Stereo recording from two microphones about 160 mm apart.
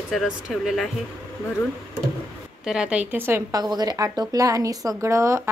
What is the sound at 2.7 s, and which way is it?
Speech, 5° right (ahead or behind).